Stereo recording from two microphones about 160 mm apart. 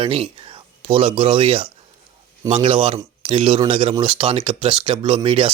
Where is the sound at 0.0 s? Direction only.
35° right (ahead or behind).